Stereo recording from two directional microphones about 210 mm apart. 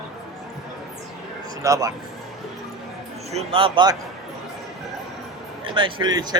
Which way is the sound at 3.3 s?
25° right (ahead or behind).